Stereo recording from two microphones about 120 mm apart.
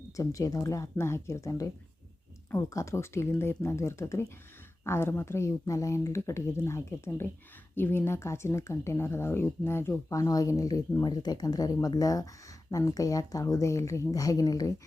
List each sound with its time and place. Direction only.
0.2 s speech: 30° left (ahead or behind)